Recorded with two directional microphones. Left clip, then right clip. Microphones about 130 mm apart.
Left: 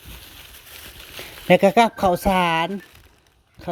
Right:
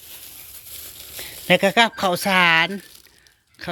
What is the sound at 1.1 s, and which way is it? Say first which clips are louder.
Speech: left 2 dB; 45° left (ahead or behind).